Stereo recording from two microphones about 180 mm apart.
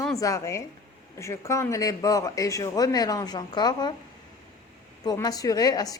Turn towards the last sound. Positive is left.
turn(degrees=20)  # may be behind; listen again after turning